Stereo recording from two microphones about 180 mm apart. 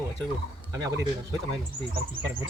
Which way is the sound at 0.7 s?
20° right (ahead or behind).